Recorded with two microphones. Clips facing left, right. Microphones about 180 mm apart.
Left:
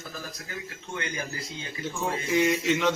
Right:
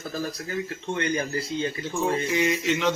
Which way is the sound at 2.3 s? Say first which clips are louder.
Even; centre (ahead or behind).